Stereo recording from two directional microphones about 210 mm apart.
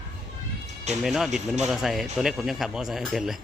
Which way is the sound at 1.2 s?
35° right (ahead or behind).